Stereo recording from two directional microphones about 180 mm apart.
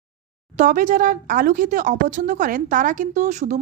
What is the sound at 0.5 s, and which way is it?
A woman's voice, 45° right (ahead or behind).